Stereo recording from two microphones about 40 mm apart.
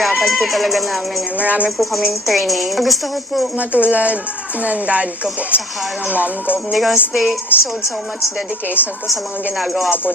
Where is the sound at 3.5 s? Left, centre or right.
Right.